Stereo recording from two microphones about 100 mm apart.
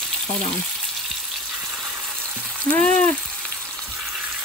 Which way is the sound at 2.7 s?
15° left (ahead or behind).